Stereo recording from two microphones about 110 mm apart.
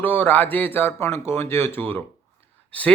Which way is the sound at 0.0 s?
15° left (ahead or behind).